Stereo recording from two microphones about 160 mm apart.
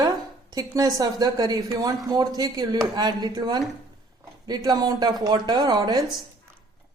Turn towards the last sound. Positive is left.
turn(degrees=-25)  # may be behind; listen again after turning